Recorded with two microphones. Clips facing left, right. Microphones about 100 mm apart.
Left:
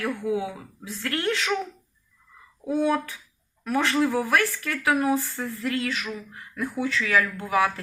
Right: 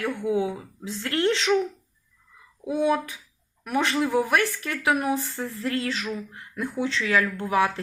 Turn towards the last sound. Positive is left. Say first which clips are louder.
# even
turn(degrees=-25)  # may be behind; listen again after turning